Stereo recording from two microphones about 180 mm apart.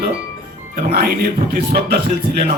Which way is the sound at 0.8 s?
60° right (ahead or behind).